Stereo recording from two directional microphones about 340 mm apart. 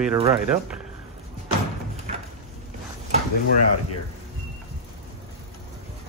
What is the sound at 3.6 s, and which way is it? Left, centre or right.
Speech, left.